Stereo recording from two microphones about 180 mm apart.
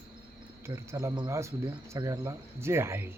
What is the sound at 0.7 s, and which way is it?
Speech, 20° right (ahead or behind).